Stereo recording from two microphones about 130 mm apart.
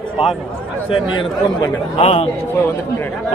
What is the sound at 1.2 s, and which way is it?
A man's voice, 45° left (ahead or behind).